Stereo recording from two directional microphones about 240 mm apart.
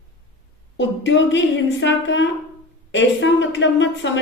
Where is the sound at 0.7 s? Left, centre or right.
Left.